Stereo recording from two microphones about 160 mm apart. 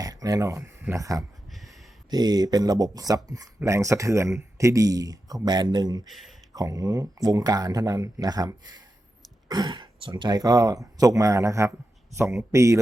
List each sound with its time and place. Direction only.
0.0 s speech: 20° right (ahead or behind)
1.5 s a sound: centre (ahead or behind)
2.0 s speech: 25° right (ahead or behind)
6.1 s speech: centre (ahead or behind)
6.5 s speech: 20° right (ahead or behind)